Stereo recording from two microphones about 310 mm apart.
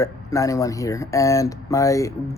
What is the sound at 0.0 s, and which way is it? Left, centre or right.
Speech, centre.